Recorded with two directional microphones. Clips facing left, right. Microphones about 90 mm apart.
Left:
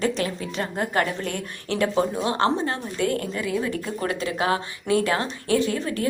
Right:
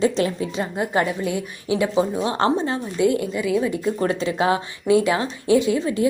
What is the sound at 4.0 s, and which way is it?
Speech, 25° right (ahead or behind).